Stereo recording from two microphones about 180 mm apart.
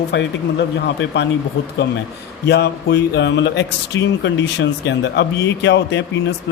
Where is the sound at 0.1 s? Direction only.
80° left.